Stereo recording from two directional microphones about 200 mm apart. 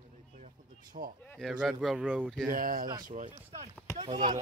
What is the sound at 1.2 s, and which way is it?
Speech, 10° left (ahead or behind).